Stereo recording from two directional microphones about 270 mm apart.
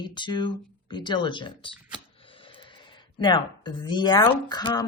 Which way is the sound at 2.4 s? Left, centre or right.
Centre.